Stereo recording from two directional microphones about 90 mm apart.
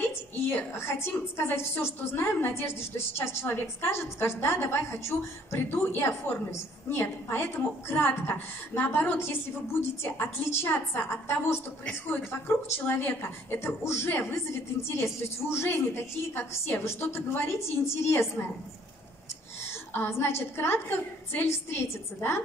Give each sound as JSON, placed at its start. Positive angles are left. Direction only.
{"t": 0.5, "sound": "a woman's voice", "side_deg": 25}
{"t": 19.9, "sound": "a woman's voice", "side_deg": 25}